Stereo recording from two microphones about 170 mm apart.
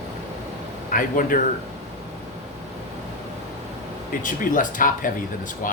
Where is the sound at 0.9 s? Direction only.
50° left (ahead or behind).